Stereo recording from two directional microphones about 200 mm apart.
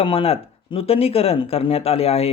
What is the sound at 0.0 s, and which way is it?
Speech, 25° left (ahead or behind).